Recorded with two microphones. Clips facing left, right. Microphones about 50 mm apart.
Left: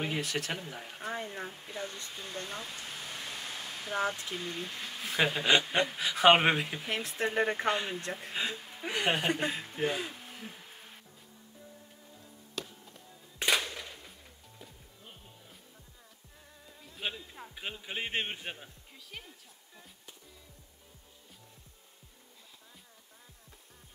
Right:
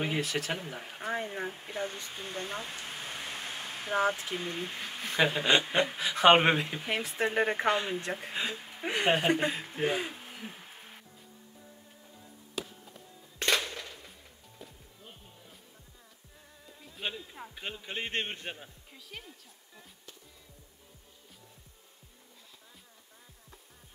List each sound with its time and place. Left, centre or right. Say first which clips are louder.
0.2 s speech: right 2 dB; centre
0.6 s speech: right 2 dB; centre
1.5 s a sound: right 4 dB; right
4.2 s speech: right 2 dB; centre
5.0 s speech: right 1 dB; centre
6.9 s speech: right 3 dB; centre
7.7 s speech: right 3 dB; centre
8.0 s speech: right 1 dB; centre
9.8 s speech: right 3 dB; centre
12.6 s music: right 2 dB; centre
13.4 s music: even; centre
13.7 s a sound: right 1 dB; centre
14.6 s music: right 3 dB; centre
16.6 s music: even; centre